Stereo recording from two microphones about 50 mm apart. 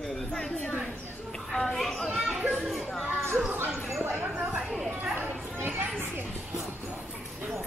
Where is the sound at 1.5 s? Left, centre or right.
Centre.